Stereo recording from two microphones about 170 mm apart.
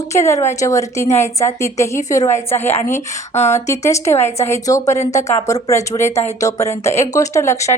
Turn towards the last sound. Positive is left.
turn(degrees=15)  # may be behind; listen again after turning